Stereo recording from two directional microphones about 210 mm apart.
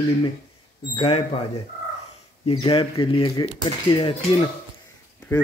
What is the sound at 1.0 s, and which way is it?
Speech, 25° left (ahead or behind).